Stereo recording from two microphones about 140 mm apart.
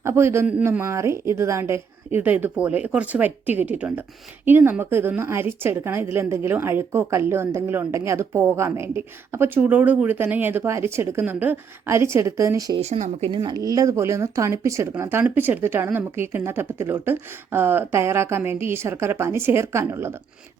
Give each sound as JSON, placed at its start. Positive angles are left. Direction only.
{"t": 0.0, "sound": "a woman's voice", "side_deg": -20}
{"t": 12.8, "sound": "speech", "side_deg": -50}
{"t": 13.3, "sound": "speech", "side_deg": -30}